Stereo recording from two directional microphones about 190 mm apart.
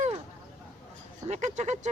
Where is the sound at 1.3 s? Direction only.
40° right (ahead or behind).